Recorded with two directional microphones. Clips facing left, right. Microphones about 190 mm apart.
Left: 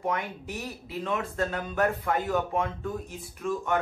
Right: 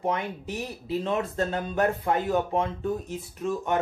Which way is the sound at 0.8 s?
30° right (ahead or behind).